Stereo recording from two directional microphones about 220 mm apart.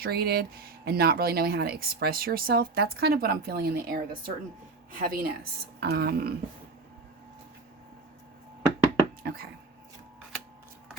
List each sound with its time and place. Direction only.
0.0 s speech: 45° right (ahead or behind)
9.2 s speech: 45° right (ahead or behind)